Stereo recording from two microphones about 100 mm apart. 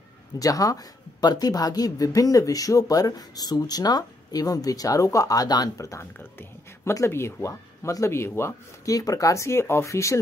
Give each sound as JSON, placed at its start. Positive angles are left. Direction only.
{"t": 0.4, "sound": "speech", "side_deg": 35}